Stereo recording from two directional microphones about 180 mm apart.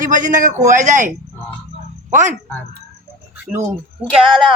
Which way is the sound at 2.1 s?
40° right (ahead or behind).